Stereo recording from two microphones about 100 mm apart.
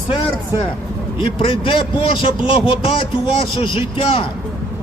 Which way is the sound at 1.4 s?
60° left (ahead or behind).